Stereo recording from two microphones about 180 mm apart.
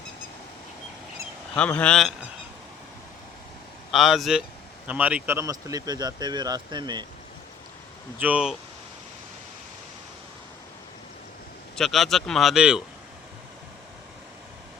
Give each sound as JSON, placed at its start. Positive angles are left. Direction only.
{"t": 1.5, "sound": "speech", "side_deg": 5}
{"t": 3.9, "sound": "speech", "side_deg": 0}
{"t": 8.2, "sound": "speech", "side_deg": -5}
{"t": 11.8, "sound": "speech", "side_deg": 0}